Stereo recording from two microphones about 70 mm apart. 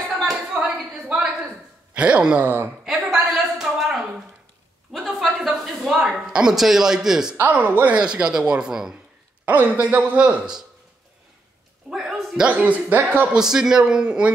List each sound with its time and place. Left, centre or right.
0.3 s a sound: centre
1.0 s a sound: centre
2.0 s speech: centre
2.4 s a man's voice: right
2.8 s a sound: centre
6.2 s speech: centre
7.5 s a man's voice: right
7.9 s speech: centre
9.5 s a man's voice: right
11.9 s a man's voice: centre
12.4 s a man's voice: centre
13.3 s speech: centre